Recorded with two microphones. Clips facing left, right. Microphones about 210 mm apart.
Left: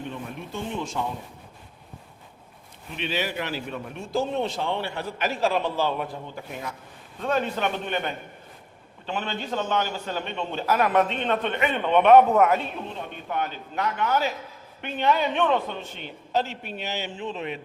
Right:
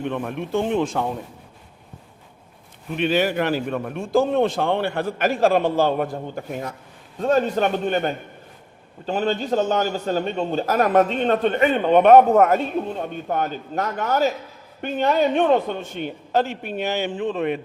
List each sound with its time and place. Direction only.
0.0 s speech: 65° right (ahead or behind)
2.9 s a man's voice: 50° right (ahead or behind)